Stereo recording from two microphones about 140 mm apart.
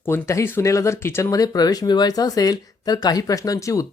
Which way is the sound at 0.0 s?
20° left (ahead or behind).